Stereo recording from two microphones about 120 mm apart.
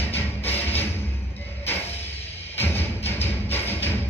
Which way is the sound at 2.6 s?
15° left (ahead or behind).